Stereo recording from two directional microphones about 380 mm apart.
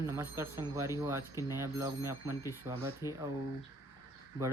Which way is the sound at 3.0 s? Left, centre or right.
Centre.